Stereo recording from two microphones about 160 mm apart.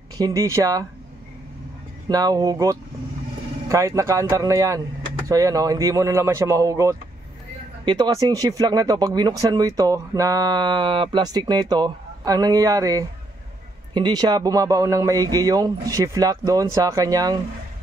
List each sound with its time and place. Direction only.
0.2 s speech: 20° right (ahead or behind)
2.0 s speech: 25° right (ahead or behind)